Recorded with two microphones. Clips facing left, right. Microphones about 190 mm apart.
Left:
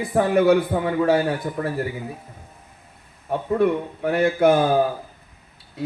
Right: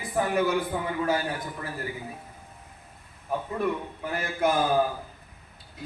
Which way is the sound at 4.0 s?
65° left (ahead or behind).